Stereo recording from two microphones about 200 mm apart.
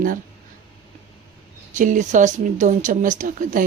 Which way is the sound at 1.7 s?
40° right (ahead or behind).